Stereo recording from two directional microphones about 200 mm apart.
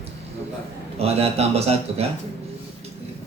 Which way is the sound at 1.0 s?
30° right (ahead or behind).